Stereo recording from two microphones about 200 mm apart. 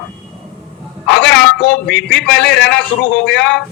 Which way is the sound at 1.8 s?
5° left (ahead or behind).